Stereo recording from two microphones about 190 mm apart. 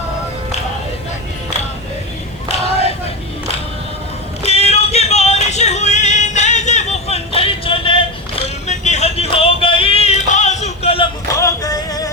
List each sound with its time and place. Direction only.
4.4 s music: 35° left (ahead or behind)
11.3 s music: 15° left (ahead or behind)